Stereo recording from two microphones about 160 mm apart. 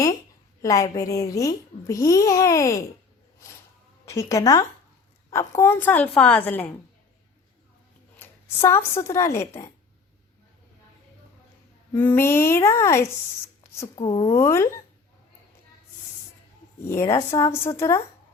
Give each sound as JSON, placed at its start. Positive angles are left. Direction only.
{"t": 0.6, "sound": "a child's voice", "side_deg": 20}
{"t": 4.1, "sound": "a child's voice", "side_deg": 20}
{"t": 8.2, "sound": "speech", "side_deg": 15}
{"t": 11.9, "sound": "a woman's voice", "side_deg": 15}
{"t": 13.8, "sound": "speech", "side_deg": 30}
{"t": 14.3, "sound": "a woman's voice", "side_deg": 15}
{"t": 16.8, "sound": "a woman's voice", "side_deg": 15}
{"t": 17.3, "sound": "a child's voice", "side_deg": 25}